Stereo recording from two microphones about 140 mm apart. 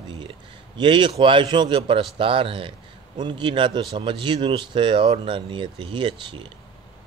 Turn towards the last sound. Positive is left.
turn(degrees=-35)  # may be behind; listen again after turning